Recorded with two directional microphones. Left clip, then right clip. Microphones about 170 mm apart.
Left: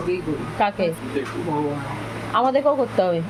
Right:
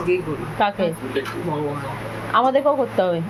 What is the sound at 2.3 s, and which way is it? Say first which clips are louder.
Speech: right 2 dB; 10° right (ahead or behind).